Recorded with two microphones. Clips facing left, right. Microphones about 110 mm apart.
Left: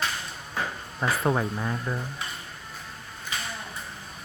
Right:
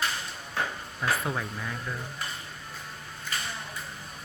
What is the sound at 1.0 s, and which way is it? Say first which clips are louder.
Speech: left 5 dB; 40° left (ahead or behind).